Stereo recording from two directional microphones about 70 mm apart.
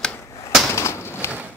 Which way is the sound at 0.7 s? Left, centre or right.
Left.